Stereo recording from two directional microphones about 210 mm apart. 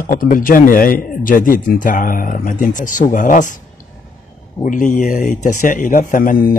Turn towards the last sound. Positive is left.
turn(degrees=40)  # may be behind; listen again after turning